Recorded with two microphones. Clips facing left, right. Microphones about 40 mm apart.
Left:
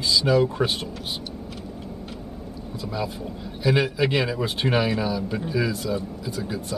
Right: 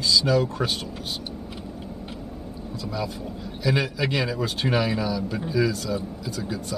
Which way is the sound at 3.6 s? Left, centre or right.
Centre.